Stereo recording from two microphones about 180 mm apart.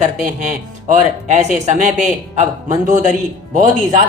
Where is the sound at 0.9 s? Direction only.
40° right (ahead or behind).